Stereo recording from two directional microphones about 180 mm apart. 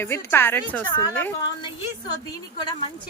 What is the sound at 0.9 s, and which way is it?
Speech, 20° left (ahead or behind).